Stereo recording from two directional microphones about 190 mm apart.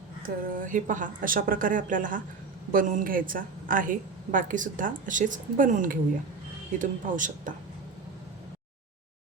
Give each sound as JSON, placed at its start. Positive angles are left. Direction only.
{"t": 0.2, "sound": "a woman's voice", "side_deg": -45}